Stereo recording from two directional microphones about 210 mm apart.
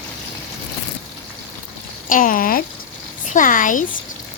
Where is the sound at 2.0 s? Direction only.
40° left (ahead or behind).